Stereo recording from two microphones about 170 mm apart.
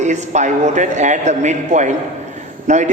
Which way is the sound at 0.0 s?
45° right (ahead or behind).